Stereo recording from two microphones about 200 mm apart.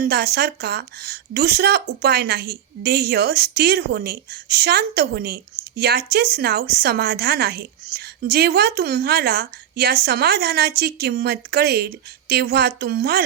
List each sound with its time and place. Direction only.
0.0 s a woman's voice: 55° right (ahead or behind)